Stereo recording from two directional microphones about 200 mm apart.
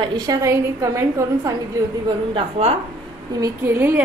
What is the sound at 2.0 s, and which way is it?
Speech, 25° right (ahead or behind).